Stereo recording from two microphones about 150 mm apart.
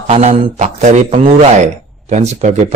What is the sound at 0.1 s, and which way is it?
A man's voice, 50° right (ahead or behind).